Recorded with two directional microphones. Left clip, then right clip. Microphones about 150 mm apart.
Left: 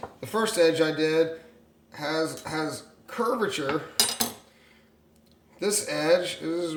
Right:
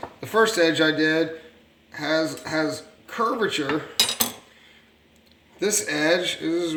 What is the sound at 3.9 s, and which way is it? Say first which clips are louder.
Cutlery: right 4 dB; 20° left (ahead or behind).